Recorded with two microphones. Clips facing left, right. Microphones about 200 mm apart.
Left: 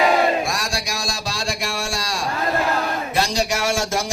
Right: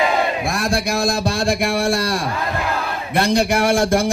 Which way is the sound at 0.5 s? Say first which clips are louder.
Right 7 dB; 55° right (ahead or behind).